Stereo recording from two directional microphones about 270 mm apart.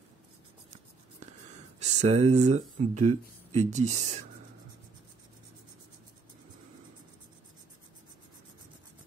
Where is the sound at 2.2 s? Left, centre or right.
Right.